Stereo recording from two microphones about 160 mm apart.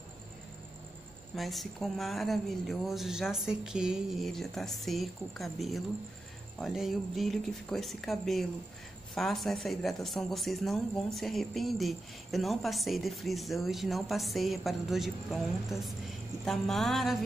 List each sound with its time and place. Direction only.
1.3 s speech: centre (ahead or behind)